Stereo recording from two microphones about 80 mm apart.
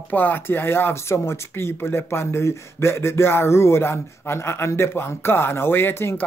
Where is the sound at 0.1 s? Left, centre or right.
Left.